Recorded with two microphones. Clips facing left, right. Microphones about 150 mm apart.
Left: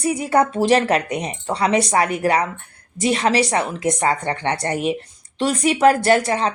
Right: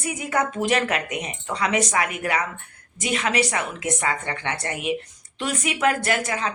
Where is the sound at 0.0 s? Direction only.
35° left (ahead or behind).